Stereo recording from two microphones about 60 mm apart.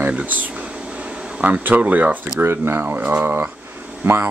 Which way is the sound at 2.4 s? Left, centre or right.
Right.